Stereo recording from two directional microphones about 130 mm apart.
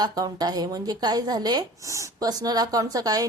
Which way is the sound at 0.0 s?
30° right (ahead or behind).